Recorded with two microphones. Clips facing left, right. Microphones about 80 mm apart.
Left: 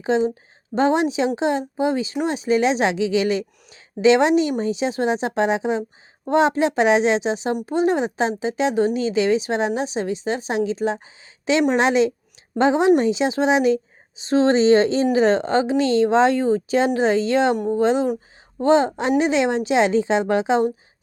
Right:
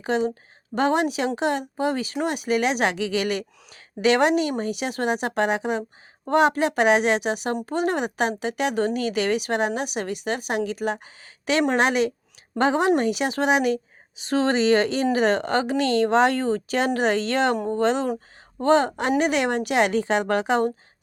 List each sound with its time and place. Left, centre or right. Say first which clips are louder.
0.0 s a woman's voice: left 4 dB; left